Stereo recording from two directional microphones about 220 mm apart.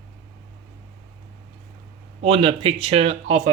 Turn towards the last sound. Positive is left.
turn(degrees=-30)  # may be behind; listen again after turning